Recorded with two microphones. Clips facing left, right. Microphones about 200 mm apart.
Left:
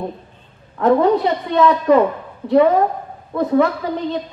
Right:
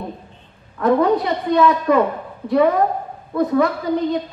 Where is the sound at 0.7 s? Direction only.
35° left (ahead or behind).